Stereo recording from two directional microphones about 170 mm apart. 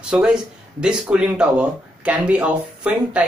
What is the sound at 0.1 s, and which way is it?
Speech, 5° right (ahead or behind).